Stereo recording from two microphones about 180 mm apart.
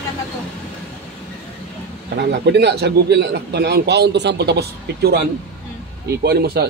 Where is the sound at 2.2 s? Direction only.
65° right (ahead or behind).